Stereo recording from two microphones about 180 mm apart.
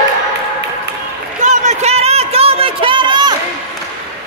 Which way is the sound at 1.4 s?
40° right (ahead or behind).